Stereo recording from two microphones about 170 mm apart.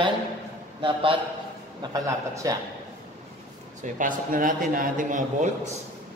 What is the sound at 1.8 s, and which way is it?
Speech, 20° right (ahead or behind).